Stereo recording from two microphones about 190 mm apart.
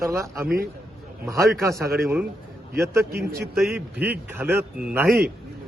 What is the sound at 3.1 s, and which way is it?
Speech, 55° right (ahead or behind).